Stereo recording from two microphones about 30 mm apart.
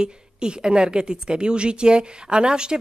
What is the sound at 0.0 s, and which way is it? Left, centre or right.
A woman's voice, right.